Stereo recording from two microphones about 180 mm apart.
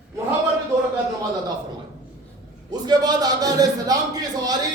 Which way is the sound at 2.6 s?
25° right (ahead or behind).